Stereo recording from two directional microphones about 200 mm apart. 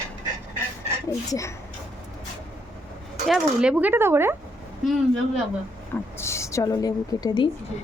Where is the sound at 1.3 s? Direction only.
15° left (ahead or behind).